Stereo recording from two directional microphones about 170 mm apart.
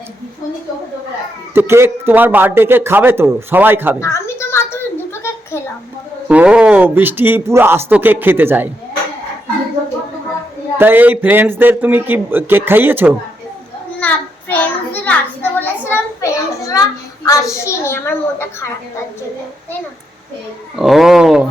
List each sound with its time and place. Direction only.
1.5 s speech: 15° right (ahead or behind)
4.0 s a sound: 15° left (ahead or behind)
6.2 s speech: 5° right (ahead or behind)
10.8 s speech: 10° right (ahead or behind)
14.0 s child singing: 10° left (ahead or behind)
15.9 s a sound: 15° left (ahead or behind)
17.5 s a woman's voice: 15° left (ahead or behind)
20.7 s speech: centre (ahead or behind)